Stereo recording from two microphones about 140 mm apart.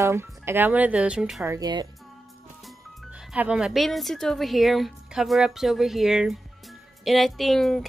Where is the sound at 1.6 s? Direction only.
30° right (ahead or behind).